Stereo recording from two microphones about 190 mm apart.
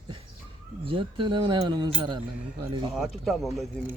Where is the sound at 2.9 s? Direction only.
Centre (ahead or behind).